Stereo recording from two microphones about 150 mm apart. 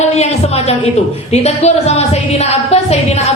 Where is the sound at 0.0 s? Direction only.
45° left (ahead or behind).